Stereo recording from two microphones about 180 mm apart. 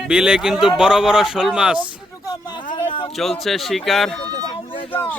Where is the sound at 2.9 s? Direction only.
30° left (ahead or behind).